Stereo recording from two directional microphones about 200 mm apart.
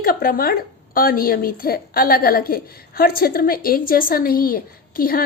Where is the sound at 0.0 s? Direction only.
45° left (ahead or behind).